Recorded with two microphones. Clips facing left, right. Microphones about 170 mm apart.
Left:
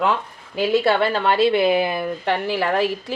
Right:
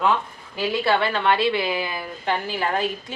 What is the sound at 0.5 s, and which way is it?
A woman's voice, 45° left (ahead or behind).